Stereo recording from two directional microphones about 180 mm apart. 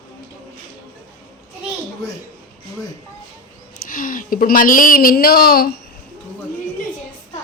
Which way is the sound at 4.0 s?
50° left (ahead or behind).